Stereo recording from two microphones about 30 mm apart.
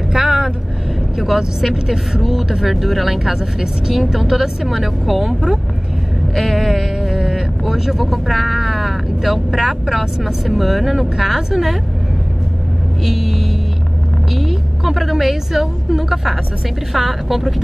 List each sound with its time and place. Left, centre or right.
0.2 s vehicle: right
1.1 s speech: centre
2.7 s speech: centre
7.0 s a sound: centre
7.6 s speech: centre
13.0 s a woman's voice: centre